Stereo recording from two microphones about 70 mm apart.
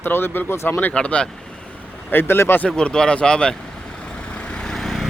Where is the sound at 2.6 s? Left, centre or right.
Centre.